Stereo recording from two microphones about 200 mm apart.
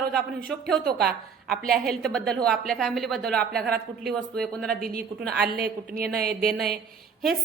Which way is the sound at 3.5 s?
50° right (ahead or behind).